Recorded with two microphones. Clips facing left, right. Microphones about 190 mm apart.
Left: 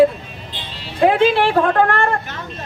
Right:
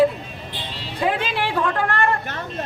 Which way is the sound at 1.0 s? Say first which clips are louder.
Left 9 dB; 55° left (ahead or behind).